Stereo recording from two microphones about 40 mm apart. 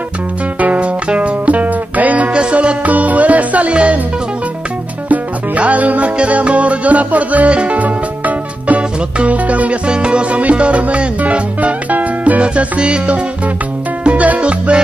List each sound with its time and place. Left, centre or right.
0.6 s music: right
2.3 s music: right
5.1 s music: right
9.8 s music: right
14.0 s music: right